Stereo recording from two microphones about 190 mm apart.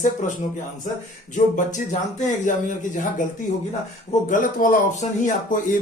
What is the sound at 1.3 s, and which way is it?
Speech, 40° left (ahead or behind).